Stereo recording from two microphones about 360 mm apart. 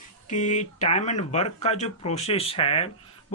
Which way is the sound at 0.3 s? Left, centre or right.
Centre.